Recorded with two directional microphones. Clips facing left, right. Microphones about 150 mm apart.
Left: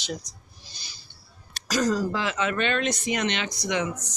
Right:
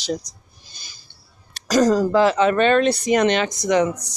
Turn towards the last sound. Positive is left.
turn(degrees=-45)  # may be behind; listen again after turning